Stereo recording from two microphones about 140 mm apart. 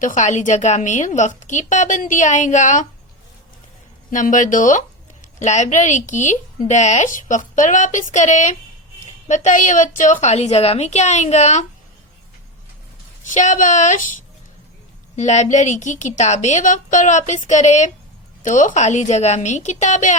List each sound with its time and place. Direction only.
0.0 s a woman's voice: 60° left (ahead or behind)
4.1 s a woman's voice: 65° left (ahead or behind)
13.2 s a woman's voice: 65° left (ahead or behind)
15.1 s a woman's voice: 55° left (ahead or behind)